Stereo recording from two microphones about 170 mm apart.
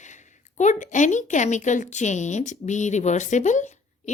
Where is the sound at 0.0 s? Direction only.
45° left (ahead or behind).